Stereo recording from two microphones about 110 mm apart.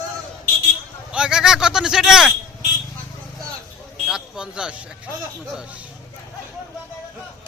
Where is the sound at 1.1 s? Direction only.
5° right (ahead or behind).